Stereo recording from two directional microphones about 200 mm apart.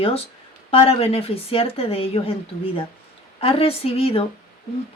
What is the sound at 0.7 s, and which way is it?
Speech, 30° left (ahead or behind).